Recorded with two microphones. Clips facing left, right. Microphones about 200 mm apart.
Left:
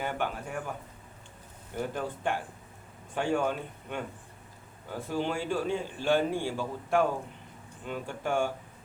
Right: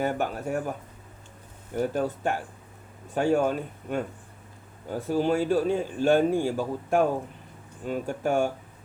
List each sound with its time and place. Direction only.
0.0 s speech: 45° right (ahead or behind)
1.9 s speech: 45° right (ahead or behind)
4.9 s speech: 40° right (ahead or behind)